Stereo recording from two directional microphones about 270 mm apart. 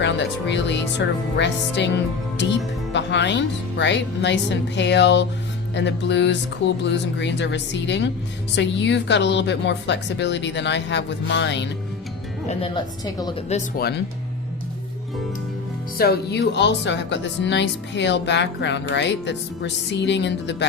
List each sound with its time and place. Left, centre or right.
0.0 s speech: left
2.9 s speech: left
12.5 s a woman's voice: centre
13.7 s speech: left
16.0 s speech: left